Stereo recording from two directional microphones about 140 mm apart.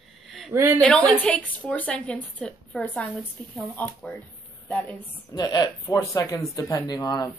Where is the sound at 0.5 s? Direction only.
20° right (ahead or behind).